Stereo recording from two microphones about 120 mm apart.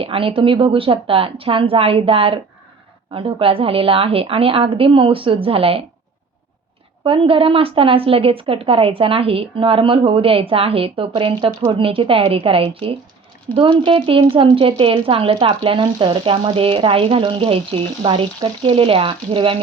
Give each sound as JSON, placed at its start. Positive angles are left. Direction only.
{"t": 0.0, "sound": "speech", "side_deg": -50}
{"t": 7.0, "sound": "speech", "side_deg": -45}